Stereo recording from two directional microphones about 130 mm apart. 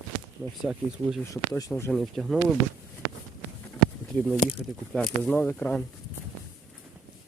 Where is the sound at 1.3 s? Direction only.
25° left (ahead or behind).